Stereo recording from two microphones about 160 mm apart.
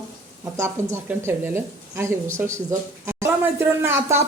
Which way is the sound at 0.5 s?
15° right (ahead or behind).